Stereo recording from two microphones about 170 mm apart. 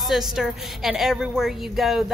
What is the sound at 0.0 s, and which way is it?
A woman's voice, centre (ahead or behind).